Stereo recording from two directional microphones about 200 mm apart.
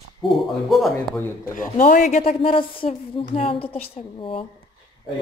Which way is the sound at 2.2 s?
25° left (ahead or behind).